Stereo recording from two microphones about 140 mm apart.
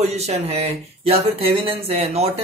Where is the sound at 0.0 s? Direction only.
50° right (ahead or behind).